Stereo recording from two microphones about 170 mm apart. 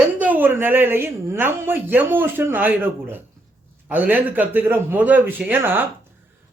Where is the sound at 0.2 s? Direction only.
10° right (ahead or behind).